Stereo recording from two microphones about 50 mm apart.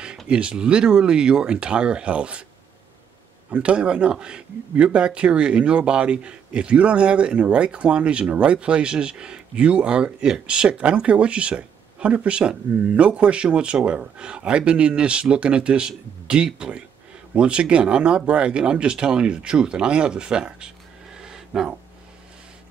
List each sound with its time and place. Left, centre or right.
0.3 s a man's voice: right
3.5 s a man's voice: right